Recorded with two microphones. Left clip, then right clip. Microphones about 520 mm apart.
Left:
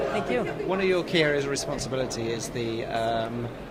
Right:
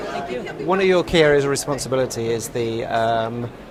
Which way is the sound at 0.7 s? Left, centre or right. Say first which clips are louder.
Right 9 dB; right.